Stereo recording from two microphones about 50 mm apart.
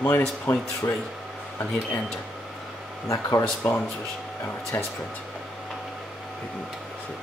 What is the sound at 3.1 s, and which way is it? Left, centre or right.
Speech, left.